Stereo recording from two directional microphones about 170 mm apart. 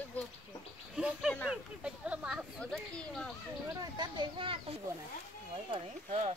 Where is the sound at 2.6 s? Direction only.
5° left (ahead or behind).